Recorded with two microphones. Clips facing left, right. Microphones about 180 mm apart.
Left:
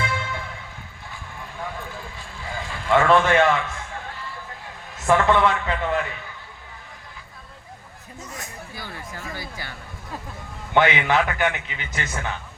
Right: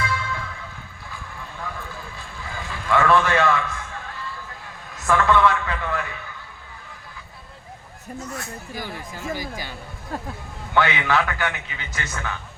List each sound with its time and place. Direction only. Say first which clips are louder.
0.0 s music: even; 25° left (ahead or behind)
2.8 s a man's voice: left 1 dB; 20° left (ahead or behind)
4.9 s a man's voice: left 1 dB; 25° left (ahead or behind)
8.7 s speech: right 4 dB; 15° right (ahead or behind)
10.8 s a man's voice: left 2 dB; 20° left (ahead or behind)